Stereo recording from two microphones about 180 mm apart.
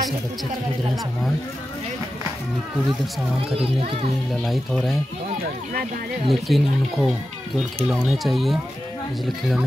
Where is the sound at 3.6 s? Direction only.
35° right (ahead or behind).